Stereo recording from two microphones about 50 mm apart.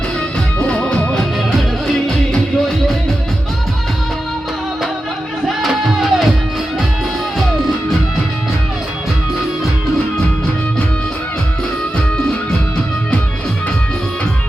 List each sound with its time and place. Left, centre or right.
0.6 s music: left
2.0 s music: centre
5.5 s music: centre